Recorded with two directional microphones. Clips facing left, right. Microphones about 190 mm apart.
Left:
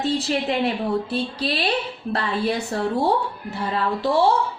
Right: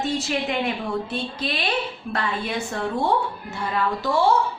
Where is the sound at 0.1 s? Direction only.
35° left (ahead or behind).